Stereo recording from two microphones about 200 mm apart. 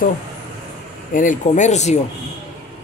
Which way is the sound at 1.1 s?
40° left (ahead or behind).